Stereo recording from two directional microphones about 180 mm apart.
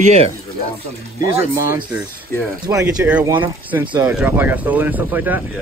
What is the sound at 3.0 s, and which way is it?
Speech, 10° right (ahead or behind).